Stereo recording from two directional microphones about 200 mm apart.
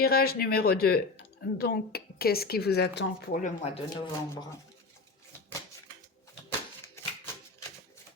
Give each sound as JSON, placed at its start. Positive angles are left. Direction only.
{"t": 0.0, "sound": "speech", "side_deg": 50}
{"t": 3.6, "sound": "speech", "side_deg": 25}